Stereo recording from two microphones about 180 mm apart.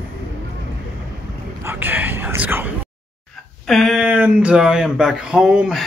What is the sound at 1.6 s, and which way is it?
Whispering, 10° right (ahead or behind).